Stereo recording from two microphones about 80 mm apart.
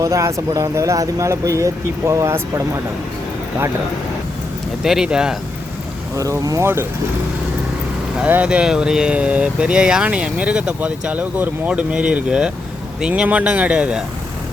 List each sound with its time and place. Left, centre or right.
0.0 s speech: right
4.8 s speech: centre
6.1 s speech: right
8.2 s speech: centre